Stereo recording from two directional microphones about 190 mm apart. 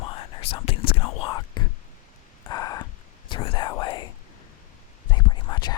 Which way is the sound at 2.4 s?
20° left (ahead or behind).